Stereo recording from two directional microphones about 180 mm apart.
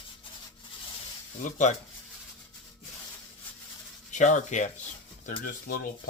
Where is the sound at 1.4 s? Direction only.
45° left (ahead or behind).